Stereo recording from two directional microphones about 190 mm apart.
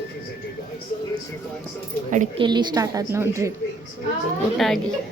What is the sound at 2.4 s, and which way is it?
A woman's voice, 25° right (ahead or behind).